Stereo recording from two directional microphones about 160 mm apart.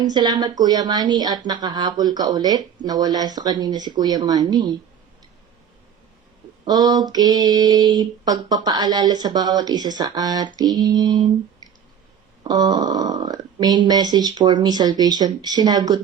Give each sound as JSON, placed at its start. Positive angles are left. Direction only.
{"t": 0.0, "sound": "speech", "side_deg": -25}
{"t": 6.7, "sound": "speech", "side_deg": -25}
{"t": 12.4, "sound": "speech", "side_deg": -25}